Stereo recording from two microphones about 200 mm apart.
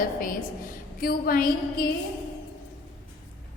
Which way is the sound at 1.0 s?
50° left (ahead or behind).